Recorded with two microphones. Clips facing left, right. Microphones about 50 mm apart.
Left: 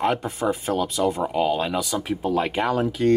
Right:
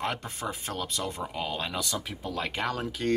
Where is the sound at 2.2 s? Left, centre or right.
Left.